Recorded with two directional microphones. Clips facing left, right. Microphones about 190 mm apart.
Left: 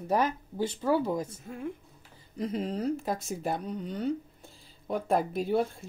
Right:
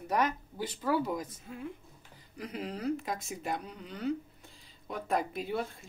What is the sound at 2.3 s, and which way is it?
Speech, 30° left (ahead or behind).